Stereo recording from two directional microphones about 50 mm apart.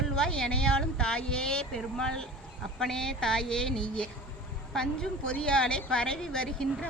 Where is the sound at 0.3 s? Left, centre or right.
Centre.